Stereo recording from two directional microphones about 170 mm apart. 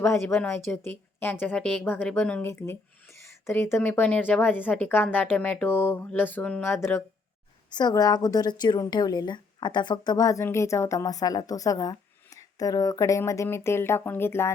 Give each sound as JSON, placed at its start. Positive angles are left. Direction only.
{"t": 0.0, "sound": "a woman's voice", "side_deg": 15}
{"t": 7.7, "sound": "a woman's voice", "side_deg": 25}